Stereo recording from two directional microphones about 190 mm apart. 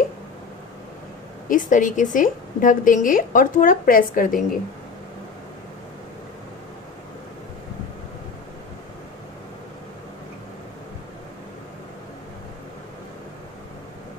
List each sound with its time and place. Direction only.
1.5 s a woman's voice: 45° left (ahead or behind)